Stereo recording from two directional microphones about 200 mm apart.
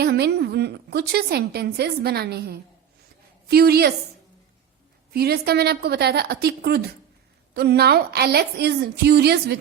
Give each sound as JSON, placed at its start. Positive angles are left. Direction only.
{"t": 0.0, "sound": "a woman's voice", "side_deg": -55}
{"t": 5.1, "sound": "a woman's voice", "side_deg": -50}